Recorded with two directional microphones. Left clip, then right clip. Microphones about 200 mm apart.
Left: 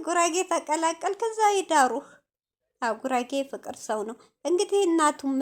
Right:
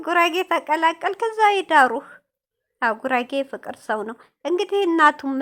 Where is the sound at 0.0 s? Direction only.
20° right (ahead or behind).